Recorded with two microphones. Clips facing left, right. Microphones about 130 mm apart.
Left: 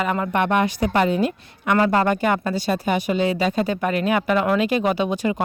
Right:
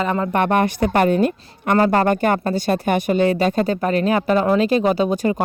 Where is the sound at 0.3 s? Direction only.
45° right (ahead or behind).